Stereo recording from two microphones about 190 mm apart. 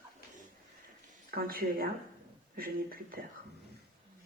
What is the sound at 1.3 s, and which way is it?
Speech, 50° right (ahead or behind).